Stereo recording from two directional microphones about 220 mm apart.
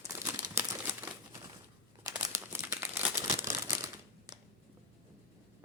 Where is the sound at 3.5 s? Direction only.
15° right (ahead or behind).